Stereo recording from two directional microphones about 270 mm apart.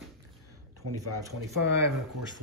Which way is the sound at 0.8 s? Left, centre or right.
Right.